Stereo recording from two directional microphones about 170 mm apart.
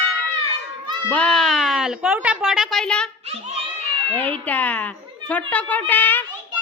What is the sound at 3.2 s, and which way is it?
Speech, 35° right (ahead or behind).